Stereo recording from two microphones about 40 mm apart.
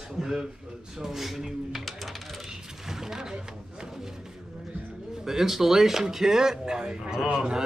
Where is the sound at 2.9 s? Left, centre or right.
Centre.